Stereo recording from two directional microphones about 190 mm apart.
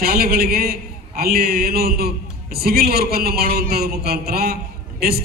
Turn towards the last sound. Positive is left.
turn(degrees=-55)  # may be behind; listen again after turning